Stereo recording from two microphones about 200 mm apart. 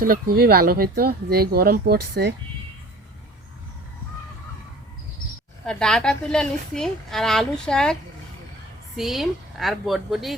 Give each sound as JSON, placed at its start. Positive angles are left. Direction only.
{"t": 0.0, "sound": "speech", "side_deg": -50}
{"t": 5.6, "sound": "a woman's voice", "side_deg": 5}
{"t": 9.0, "sound": "a woman's voice", "side_deg": 0}